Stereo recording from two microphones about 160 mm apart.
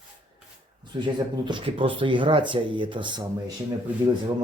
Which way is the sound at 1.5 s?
30° right (ahead or behind).